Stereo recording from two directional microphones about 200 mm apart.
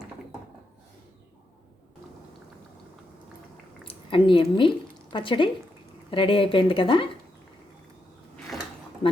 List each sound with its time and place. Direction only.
3.8 s a woman's voice: 25° left (ahead or behind)